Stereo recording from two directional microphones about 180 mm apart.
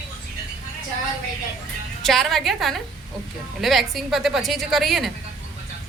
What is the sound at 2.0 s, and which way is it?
A woman's voice, centre (ahead or behind).